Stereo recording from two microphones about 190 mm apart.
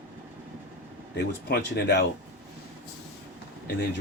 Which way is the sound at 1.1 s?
60° left (ahead or behind).